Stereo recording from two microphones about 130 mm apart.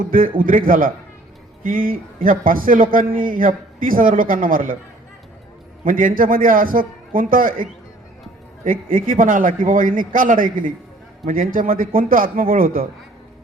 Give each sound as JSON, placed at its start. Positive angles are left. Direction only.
{"t": 0.0, "sound": "a man's voice", "side_deg": -90}
{"t": 5.8, "sound": "a man's voice", "side_deg": -90}